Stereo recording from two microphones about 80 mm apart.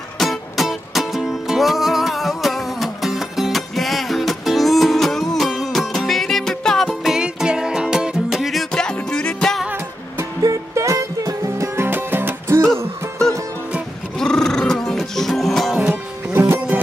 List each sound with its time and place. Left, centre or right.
0.2 s music: centre
10.4 s music: right
14.1 s music: centre
15.9 s music: right
16.5 s music: centre